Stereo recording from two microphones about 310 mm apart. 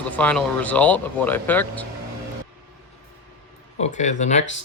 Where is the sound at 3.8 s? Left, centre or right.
Left.